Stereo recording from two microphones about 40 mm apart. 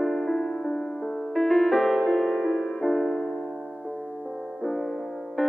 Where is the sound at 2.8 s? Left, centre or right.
Centre.